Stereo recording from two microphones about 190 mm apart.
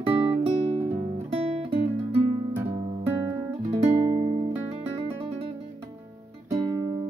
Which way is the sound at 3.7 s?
30° right (ahead or behind).